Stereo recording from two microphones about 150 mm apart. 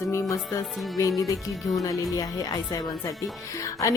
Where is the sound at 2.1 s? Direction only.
25° left (ahead or behind).